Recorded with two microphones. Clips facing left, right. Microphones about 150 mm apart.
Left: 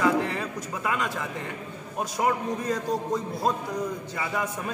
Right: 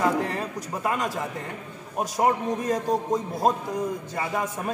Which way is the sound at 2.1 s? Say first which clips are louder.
Right 3 dB; 45° right (ahead or behind).